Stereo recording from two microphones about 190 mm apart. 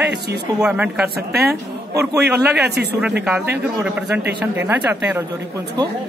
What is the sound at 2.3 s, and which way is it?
Speech, 60° right (ahead or behind).